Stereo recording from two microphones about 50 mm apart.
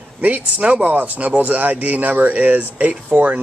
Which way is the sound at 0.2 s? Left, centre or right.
Right.